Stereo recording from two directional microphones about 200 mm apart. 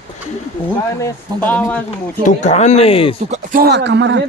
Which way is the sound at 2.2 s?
35° left (ahead or behind).